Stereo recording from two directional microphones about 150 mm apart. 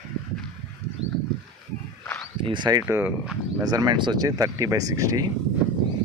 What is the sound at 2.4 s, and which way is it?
Speech, 30° right (ahead or behind).